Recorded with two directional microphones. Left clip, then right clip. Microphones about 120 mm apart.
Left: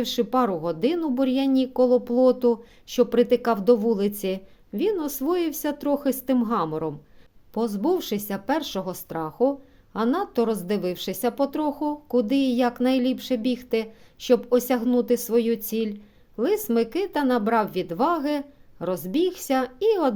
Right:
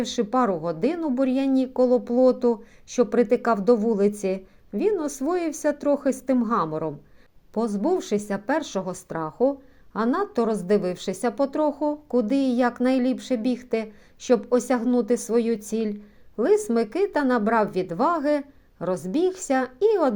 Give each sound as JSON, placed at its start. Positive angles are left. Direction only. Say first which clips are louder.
{"t": 0.0, "sound": "a woman's voice", "louder": "even", "side_deg": 20}